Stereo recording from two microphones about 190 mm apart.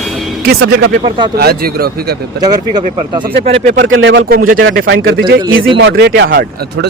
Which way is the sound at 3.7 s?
75° right (ahead or behind).